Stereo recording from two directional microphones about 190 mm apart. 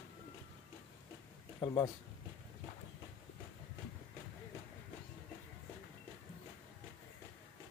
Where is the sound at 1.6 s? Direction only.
20° left (ahead or behind).